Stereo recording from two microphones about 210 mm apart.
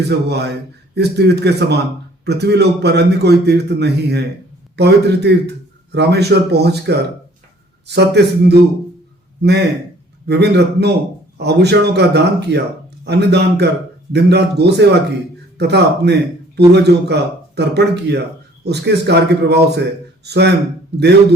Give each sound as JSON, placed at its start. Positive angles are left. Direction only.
{"t": 0.1, "sound": "a man's voice", "side_deg": -50}